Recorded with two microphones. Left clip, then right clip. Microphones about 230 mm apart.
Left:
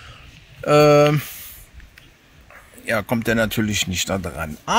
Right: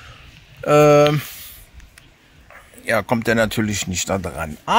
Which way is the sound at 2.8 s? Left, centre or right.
Centre.